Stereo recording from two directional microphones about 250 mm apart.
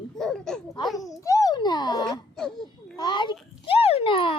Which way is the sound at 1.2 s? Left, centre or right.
Centre.